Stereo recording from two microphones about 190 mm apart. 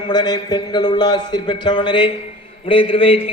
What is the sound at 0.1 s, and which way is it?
A man's voice, 20° left (ahead or behind).